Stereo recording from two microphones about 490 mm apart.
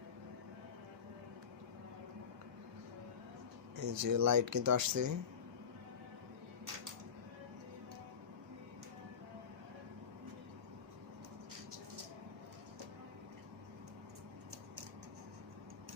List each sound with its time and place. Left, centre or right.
3.8 s speech: right